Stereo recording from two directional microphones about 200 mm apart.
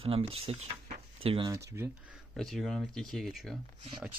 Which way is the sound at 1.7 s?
15° right (ahead or behind).